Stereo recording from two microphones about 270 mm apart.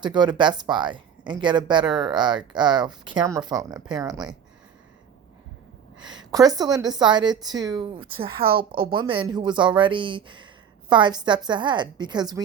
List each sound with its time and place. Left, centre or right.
0.0 s speech: centre
6.0 s speech: centre
8.3 s a woman's voice: right
8.7 s speech: centre